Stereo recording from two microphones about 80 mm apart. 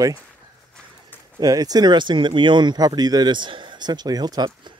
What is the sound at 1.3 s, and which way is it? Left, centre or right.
Speech, right.